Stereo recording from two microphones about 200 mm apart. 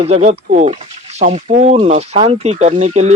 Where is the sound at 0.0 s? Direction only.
35° right (ahead or behind).